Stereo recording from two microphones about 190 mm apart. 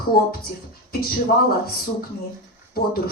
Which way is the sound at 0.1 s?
50° left (ahead or behind).